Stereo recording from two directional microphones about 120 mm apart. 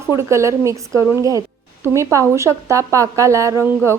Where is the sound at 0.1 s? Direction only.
25° right (ahead or behind).